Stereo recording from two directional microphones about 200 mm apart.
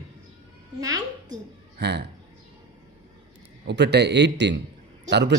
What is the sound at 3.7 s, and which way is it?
A man's voice, 60° right (ahead or behind).